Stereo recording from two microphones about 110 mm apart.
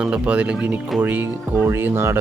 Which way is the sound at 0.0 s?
10° right (ahead or behind).